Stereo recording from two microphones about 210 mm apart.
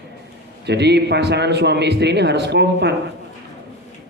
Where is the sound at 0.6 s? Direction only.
55° right (ahead or behind).